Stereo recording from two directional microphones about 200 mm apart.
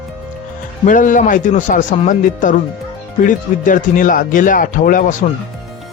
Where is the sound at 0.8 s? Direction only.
40° left (ahead or behind).